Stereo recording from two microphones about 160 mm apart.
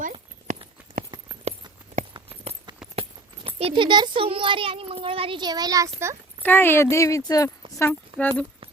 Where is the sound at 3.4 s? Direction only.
35° right (ahead or behind).